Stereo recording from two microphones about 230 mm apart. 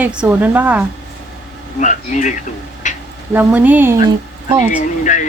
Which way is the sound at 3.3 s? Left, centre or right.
Centre.